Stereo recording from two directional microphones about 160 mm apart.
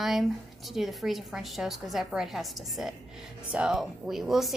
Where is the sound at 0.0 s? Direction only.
Centre (ahead or behind).